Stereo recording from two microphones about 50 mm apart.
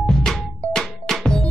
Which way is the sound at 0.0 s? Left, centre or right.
Centre.